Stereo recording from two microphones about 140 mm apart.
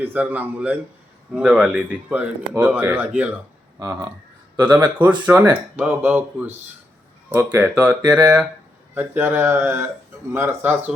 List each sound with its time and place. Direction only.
0.0 s speech: 15° right (ahead or behind)
3.8 s speech: 20° right (ahead or behind)